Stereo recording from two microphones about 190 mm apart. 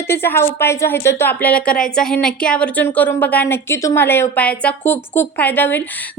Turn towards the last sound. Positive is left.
turn(degrees=10)  # may be behind; listen again after turning